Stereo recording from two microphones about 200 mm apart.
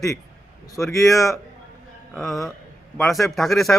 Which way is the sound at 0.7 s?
15° left (ahead or behind).